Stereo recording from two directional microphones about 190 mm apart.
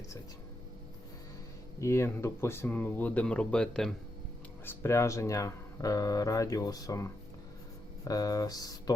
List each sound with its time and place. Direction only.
1.8 s speech: 15° left (ahead or behind)